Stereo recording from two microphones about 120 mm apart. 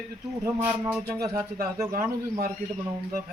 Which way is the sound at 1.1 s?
25° right (ahead or behind).